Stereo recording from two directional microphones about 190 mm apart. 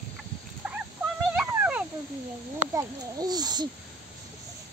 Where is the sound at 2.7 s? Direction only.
20° right (ahead or behind).